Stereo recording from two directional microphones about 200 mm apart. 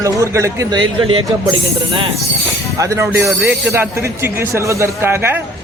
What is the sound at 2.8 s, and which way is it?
Speech, 15° right (ahead or behind).